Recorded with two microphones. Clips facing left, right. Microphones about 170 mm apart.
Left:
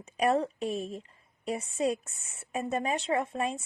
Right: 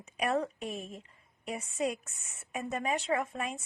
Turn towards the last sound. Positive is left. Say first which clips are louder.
# left 4 dB
turn(degrees=30)  # may be behind; listen again after turning